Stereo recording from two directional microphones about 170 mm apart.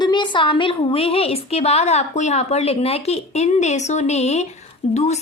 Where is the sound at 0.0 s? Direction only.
25° left (ahead or behind).